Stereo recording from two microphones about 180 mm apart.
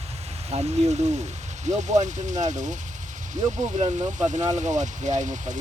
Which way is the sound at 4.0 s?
20° right (ahead or behind).